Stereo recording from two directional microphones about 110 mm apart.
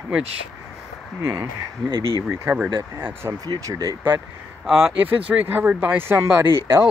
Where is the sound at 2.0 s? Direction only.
35° left (ahead or behind).